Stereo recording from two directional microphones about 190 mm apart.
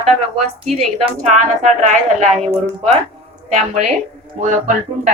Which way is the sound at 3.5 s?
40° right (ahead or behind).